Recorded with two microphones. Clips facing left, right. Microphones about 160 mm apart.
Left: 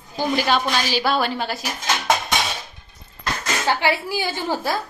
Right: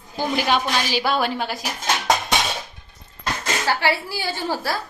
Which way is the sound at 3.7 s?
15° left (ahead or behind).